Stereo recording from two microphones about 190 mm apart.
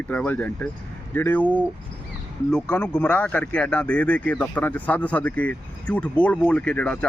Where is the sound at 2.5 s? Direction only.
5° left (ahead or behind).